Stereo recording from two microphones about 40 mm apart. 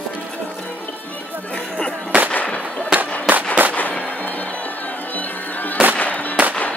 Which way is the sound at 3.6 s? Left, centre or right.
Right.